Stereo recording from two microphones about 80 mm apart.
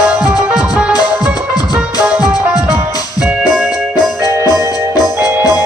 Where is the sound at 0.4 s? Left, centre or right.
Centre.